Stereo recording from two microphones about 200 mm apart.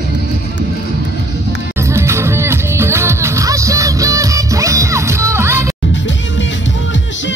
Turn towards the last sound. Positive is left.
turn(degrees=-15)  # may be behind; listen again after turning